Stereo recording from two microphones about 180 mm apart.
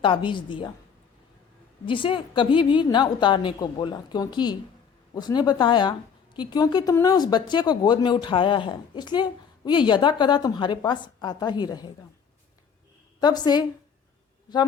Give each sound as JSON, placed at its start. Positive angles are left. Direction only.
{"t": 0.0, "sound": "speech", "side_deg": 25}
{"t": 1.9, "sound": "speech", "side_deg": 30}
{"t": 13.1, "sound": "speech", "side_deg": 20}